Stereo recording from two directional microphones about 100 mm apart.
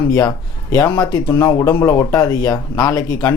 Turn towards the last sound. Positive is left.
turn(degrees=35)  # may be behind; listen again after turning